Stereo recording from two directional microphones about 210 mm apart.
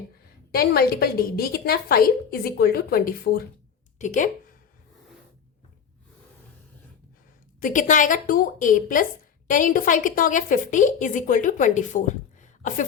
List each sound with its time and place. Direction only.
0.5 s a woman's voice: 45° left (ahead or behind)
7.6 s a woman's voice: 40° left (ahead or behind)